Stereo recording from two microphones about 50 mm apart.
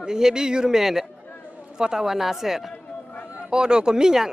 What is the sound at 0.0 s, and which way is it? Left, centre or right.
Speech, centre.